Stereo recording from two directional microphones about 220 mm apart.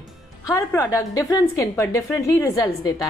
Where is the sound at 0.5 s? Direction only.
15° left (ahead or behind).